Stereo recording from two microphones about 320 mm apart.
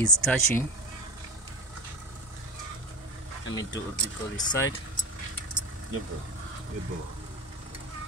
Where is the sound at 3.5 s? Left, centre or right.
Centre.